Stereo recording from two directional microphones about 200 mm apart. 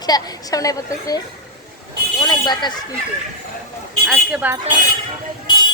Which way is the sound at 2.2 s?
20° left (ahead or behind).